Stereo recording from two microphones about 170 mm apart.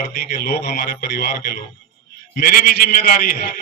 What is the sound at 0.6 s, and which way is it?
Speech, 60° left (ahead or behind).